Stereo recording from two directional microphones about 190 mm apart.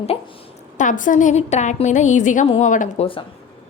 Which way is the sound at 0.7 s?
45° left (ahead or behind).